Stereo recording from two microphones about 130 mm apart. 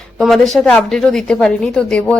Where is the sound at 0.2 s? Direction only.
Centre (ahead or behind).